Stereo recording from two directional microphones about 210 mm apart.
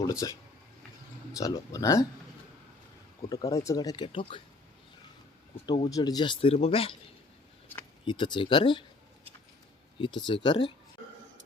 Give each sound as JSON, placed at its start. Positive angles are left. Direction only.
{"t": 0.0, "sound": "speech", "side_deg": 15}
{"t": 1.4, "sound": "speech", "side_deg": 15}
{"t": 3.2, "sound": "speech", "side_deg": 25}
{"t": 5.6, "sound": "speech", "side_deg": 20}
{"t": 8.0, "sound": "speech", "side_deg": 20}
{"t": 10.0, "sound": "speech", "side_deg": 20}